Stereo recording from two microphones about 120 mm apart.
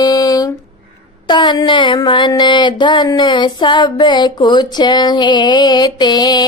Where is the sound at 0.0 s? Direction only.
30° left (ahead or behind).